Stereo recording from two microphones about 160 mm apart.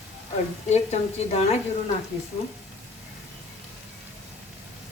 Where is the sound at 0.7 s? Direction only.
45° left (ahead or behind).